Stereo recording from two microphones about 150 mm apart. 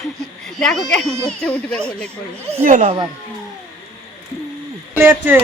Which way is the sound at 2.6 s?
60° right (ahead or behind).